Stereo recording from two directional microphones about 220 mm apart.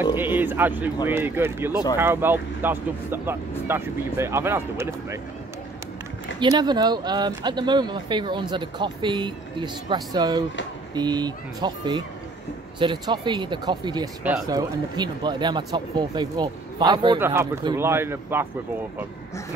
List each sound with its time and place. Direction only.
0.0 s speech: 10° right (ahead or behind)
6.4 s speech: 20° right (ahead or behind)